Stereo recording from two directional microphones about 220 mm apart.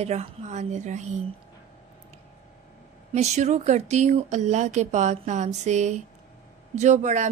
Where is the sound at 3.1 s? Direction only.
30° right (ahead or behind).